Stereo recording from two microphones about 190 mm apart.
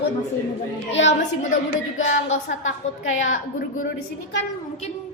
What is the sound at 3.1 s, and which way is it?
Speech, 90° left.